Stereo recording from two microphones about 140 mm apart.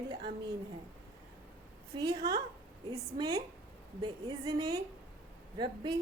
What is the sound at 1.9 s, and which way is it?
A woman's voice, 25° right (ahead or behind).